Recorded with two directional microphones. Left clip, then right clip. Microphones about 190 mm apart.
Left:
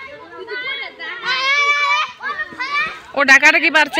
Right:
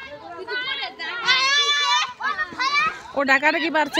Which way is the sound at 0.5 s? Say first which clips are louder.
Left 2 dB; 30° right (ahead or behind).